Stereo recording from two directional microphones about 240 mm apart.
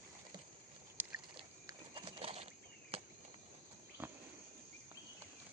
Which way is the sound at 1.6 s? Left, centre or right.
Right.